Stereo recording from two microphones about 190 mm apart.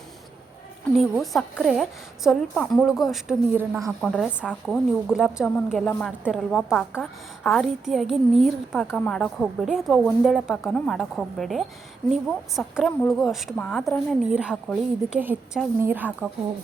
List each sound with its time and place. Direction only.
0.9 s a woman's voice: centre (ahead or behind)
3.8 s a woman's voice: centre (ahead or behind)
15.2 s a woman's voice: 10° right (ahead or behind)